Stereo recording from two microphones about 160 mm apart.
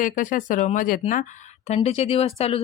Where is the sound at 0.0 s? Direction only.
55° left (ahead or behind).